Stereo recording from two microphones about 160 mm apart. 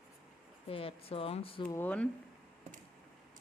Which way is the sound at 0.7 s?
35° left (ahead or behind).